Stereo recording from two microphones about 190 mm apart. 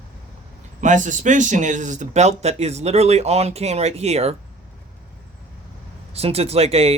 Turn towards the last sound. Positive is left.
turn(degrees=-30)  # may be behind; listen again after turning